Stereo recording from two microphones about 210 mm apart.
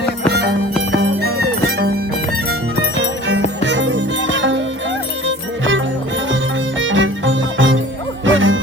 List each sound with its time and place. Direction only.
1.2 s music: 50° right (ahead or behind)
3.0 s music: 60° right (ahead or behind)
6.7 s music: 65° right (ahead or behind)